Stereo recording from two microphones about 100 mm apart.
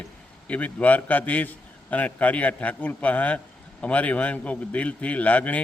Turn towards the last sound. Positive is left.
turn(degrees=15)  # may be behind; listen again after turning